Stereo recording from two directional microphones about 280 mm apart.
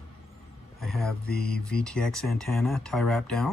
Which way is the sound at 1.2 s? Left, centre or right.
Left.